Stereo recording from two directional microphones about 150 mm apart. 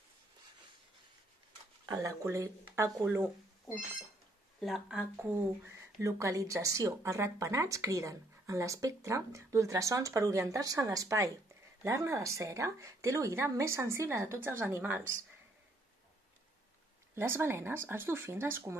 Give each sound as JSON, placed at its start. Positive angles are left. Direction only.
{"t": 1.9, "sound": "speech", "side_deg": -20}
{"t": 4.6, "sound": "speech", "side_deg": 0}
{"t": 17.1, "sound": "speech", "side_deg": -15}